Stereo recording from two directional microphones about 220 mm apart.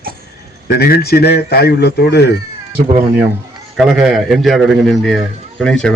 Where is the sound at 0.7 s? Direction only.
45° left (ahead or behind).